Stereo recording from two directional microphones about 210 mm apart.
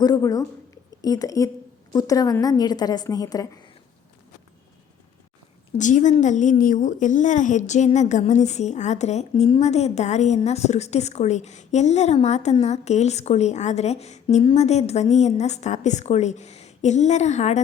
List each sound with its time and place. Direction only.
0.0 s a woman's voice: 15° left (ahead or behind)
5.7 s a woman's voice: 35° left (ahead or behind)